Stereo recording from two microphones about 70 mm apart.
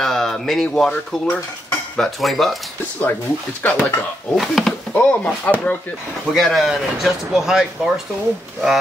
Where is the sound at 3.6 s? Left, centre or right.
Centre.